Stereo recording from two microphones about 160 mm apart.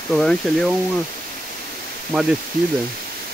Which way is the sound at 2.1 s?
5° right (ahead or behind).